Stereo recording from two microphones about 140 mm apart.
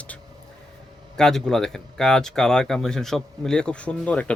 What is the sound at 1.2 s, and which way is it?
Speech, 5° left (ahead or behind).